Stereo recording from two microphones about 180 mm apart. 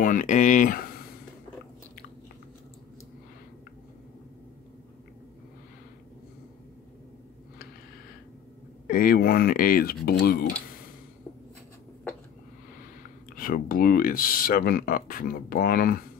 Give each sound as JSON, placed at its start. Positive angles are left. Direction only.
{"t": 0.0, "sound": "speech", "side_deg": 45}
{"t": 8.8, "sound": "speech", "side_deg": 50}
{"t": 13.4, "sound": "speech", "side_deg": 50}